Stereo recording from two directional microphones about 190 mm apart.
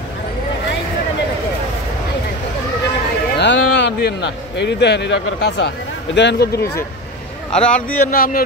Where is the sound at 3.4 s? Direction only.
60° left (ahead or behind).